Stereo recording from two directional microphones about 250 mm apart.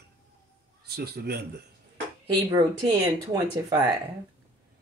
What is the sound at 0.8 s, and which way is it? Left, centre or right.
Speech, right.